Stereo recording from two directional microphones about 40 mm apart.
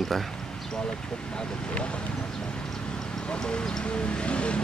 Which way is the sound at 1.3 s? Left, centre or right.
Left.